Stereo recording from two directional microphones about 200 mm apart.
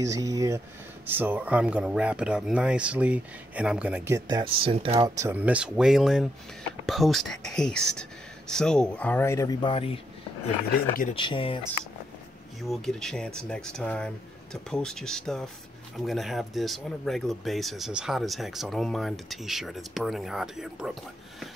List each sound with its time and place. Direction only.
0.0 s speech: 15° right (ahead or behind)
5.1 s speech: 10° right (ahead or behind); by 9.9 s 25° left (ahead or behind)
10.7 s speech: 40° left (ahead or behind)
11.1 s speech: 25° left (ahead or behind)
12.6 s speech: centre (ahead or behind)